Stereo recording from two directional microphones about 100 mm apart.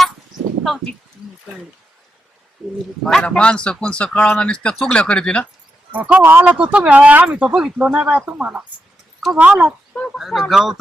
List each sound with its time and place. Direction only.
0.6 s speech: 5° left (ahead or behind)
3.0 s speech: 5° left (ahead or behind)
5.9 s speech: 15° right (ahead or behind)